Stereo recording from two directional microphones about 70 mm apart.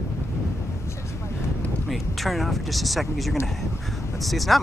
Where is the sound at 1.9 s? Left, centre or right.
Centre.